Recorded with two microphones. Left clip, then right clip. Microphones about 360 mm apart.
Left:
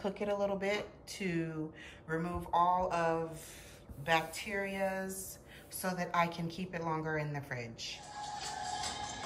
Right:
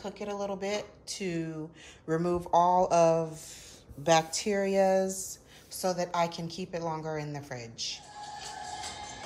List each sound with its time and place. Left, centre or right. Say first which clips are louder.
0.0 s a woman's voice: left 1 dB; centre